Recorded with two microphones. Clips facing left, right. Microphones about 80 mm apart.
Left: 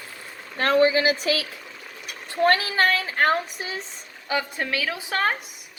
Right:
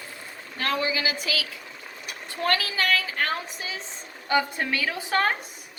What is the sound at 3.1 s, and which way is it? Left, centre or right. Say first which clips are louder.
Speech: left 7 dB; left.